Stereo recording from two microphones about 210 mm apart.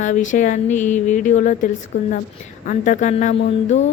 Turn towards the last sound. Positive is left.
turn(degrees=35)  # may be behind; listen again after turning